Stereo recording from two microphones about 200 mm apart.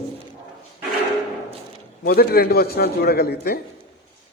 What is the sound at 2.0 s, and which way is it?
Speech, 50° left (ahead or behind).